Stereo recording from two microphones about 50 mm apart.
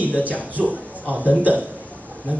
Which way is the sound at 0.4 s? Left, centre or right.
Right.